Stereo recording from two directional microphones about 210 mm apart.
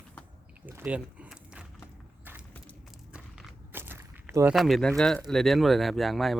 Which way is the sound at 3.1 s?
10° right (ahead or behind).